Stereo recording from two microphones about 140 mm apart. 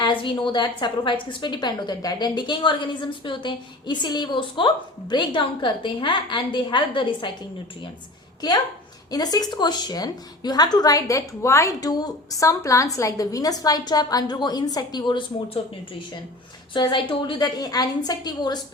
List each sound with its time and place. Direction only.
0.0 s a woman's voice: 35° left (ahead or behind)
8.4 s a woman's voice: 30° left (ahead or behind)
16.7 s a woman's voice: 35° left (ahead or behind)